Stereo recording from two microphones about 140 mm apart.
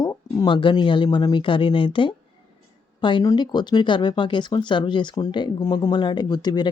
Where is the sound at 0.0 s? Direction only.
30° left (ahead or behind).